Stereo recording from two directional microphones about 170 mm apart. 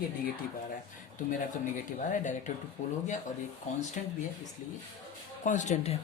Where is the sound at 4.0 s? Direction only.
50° left (ahead or behind).